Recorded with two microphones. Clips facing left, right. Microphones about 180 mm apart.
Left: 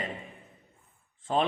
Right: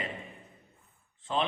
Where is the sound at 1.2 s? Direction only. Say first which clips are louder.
Left 3 dB; 45° left (ahead or behind).